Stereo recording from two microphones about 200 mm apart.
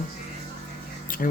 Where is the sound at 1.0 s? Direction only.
45° left (ahead or behind).